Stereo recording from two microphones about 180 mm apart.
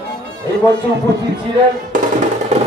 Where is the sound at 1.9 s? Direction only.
45° right (ahead or behind).